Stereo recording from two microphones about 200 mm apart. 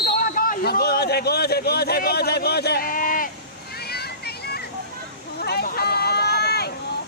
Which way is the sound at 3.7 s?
50° left (ahead or behind).